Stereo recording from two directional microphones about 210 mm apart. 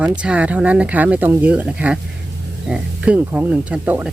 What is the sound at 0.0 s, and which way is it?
Speech, 5° right (ahead or behind).